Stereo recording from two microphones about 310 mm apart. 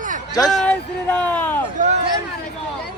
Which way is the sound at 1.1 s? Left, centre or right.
Centre.